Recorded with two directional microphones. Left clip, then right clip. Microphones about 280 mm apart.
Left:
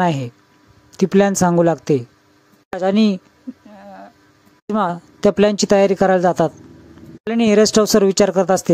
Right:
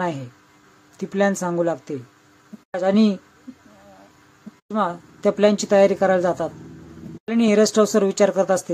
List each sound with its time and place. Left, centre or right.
0.0 s speech: left
4.7 s speech: left